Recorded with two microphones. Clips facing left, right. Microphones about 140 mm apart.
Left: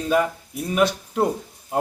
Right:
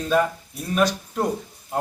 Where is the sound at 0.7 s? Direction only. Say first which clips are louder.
Left 1 dB; 25° left (ahead or behind).